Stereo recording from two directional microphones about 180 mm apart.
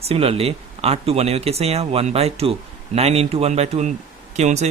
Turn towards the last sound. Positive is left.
turn(degrees=-40)  # may be behind; listen again after turning